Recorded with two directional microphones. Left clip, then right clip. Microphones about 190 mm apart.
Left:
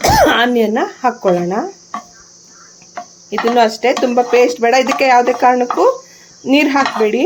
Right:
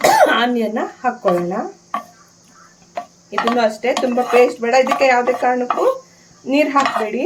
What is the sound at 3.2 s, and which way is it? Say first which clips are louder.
Speech: left 4 dB; 50° left (ahead or behind).